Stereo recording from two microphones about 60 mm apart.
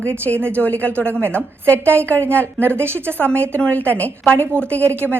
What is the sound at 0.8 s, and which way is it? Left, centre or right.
Speech, left.